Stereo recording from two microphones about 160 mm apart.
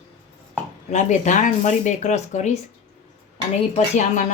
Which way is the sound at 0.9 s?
50° left (ahead or behind).